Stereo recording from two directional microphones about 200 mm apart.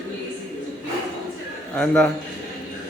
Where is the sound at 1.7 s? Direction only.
10° left (ahead or behind).